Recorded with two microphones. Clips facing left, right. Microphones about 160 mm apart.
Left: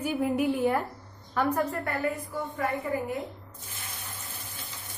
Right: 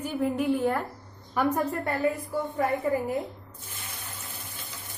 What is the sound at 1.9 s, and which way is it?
Speech, 25° right (ahead or behind).